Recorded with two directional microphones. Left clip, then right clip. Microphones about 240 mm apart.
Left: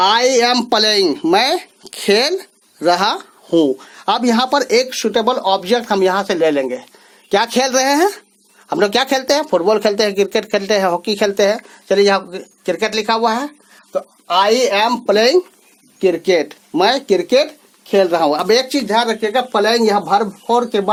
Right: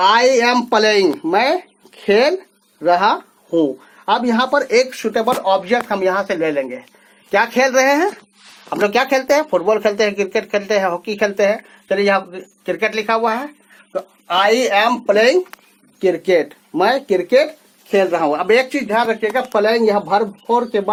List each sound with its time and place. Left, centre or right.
0.0 s speech: left
14.4 s speech: left
16.0 s speech: left
18.1 s speech: left